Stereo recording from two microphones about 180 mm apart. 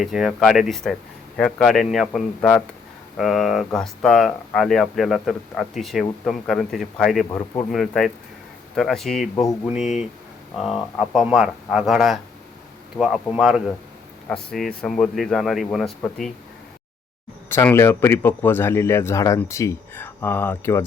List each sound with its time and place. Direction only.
0.0 s speech: centre (ahead or behind)
9.3 s speech: 20° left (ahead or behind)
10.6 s speech: centre (ahead or behind)
17.5 s speech: 15° left (ahead or behind)